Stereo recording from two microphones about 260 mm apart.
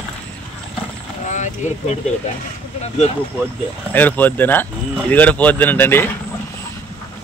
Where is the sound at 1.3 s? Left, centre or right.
Left.